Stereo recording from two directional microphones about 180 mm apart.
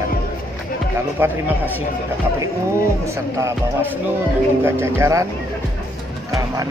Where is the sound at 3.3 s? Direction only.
15° right (ahead or behind).